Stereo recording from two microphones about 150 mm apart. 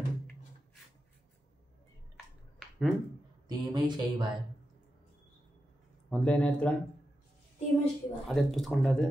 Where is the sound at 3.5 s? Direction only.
30° right (ahead or behind).